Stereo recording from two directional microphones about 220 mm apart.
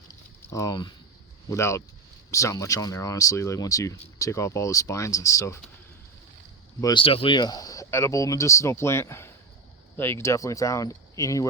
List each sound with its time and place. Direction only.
0.1 s a sound: 15° left (ahead or behind)
1.5 s speech: 15° left (ahead or behind)
6.8 s speech: 25° left (ahead or behind)